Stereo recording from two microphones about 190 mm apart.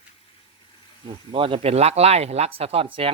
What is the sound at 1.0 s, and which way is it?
Speech, 30° right (ahead or behind).